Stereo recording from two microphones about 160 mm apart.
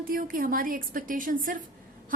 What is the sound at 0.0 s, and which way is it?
A woman's voice, 60° right (ahead or behind).